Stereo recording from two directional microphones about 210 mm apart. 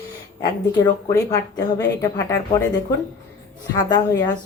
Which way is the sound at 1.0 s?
15° left (ahead or behind).